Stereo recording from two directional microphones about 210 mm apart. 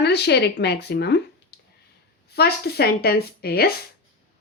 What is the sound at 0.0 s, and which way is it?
A woman's voice, 50° left (ahead or behind).